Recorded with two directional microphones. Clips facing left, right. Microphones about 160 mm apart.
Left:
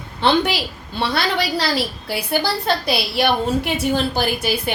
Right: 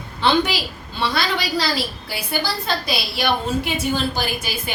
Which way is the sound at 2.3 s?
65° left (ahead or behind).